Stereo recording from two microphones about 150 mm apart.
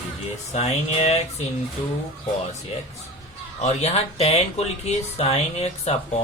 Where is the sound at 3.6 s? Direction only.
45° left (ahead or behind).